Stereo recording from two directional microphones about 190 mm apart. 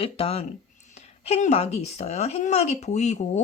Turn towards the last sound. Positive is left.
turn(degrees=35)  # may be behind; listen again after turning